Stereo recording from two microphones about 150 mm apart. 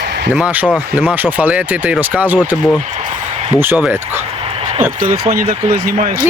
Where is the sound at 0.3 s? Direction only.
10° right (ahead or behind).